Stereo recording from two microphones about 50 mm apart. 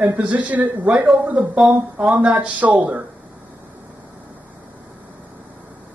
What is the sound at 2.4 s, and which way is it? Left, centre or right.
Speech, right.